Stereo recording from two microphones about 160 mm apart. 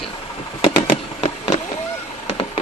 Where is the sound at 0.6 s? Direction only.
35° left (ahead or behind).